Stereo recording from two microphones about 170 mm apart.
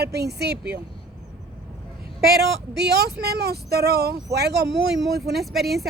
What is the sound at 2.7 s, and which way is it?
A woman's voice, 75° right (ahead or behind).